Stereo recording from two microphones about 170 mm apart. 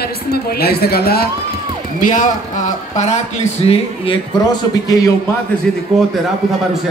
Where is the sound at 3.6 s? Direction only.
30° left (ahead or behind).